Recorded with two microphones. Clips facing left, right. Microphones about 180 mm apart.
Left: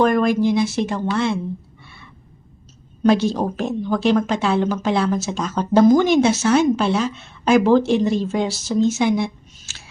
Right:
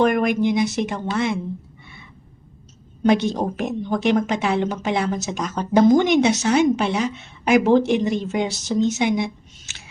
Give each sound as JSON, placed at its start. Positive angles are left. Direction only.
{"t": 0.0, "sound": "a woman's voice", "side_deg": -20}
{"t": 3.0, "sound": "a woman's voice", "side_deg": -20}